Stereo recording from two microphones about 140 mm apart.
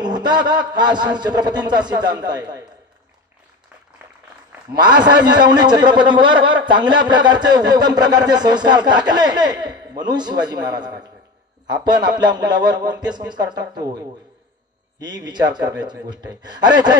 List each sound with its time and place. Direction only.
0.0 s a man's voice: 30° right (ahead or behind)
4.7 s a man's voice: 30° right (ahead or behind)
15.0 s a man's voice: 30° right (ahead or behind)